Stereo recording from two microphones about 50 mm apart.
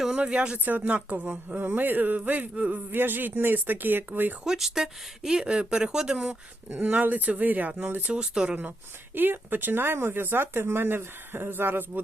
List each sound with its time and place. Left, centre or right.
0.2 s speech: right
0.6 s speech: right
2.9 s speech: right
4.4 s speech: centre
6.7 s speech: right
8.1 s speech: centre
9.1 s speech: right